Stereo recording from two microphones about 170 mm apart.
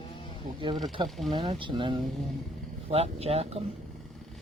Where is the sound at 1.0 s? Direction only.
25° right (ahead or behind).